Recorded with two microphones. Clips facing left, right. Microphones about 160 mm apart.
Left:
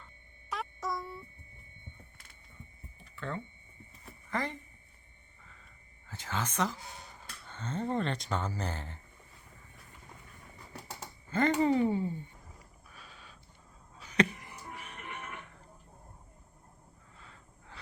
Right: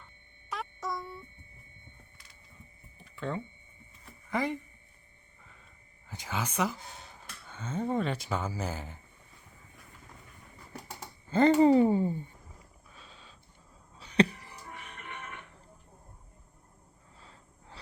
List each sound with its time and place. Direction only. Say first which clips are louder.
0.5 s a sound: even; centre (ahead or behind)
3.2 s speech: right 4 dB; 15° right (ahead or behind)
6.1 s speech: right 1 dB; 10° right (ahead or behind)
11.3 s speech: right 6 dB; 30° right (ahead or behind)
12.9 s a sound: even; 25° right (ahead or behind)
17.2 s gasp: right 1 dB; 30° right (ahead or behind)